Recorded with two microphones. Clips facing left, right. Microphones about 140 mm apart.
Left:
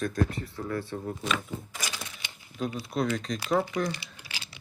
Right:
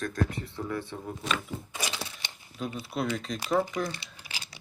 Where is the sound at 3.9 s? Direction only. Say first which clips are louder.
Left 2 dB; 25° right (ahead or behind).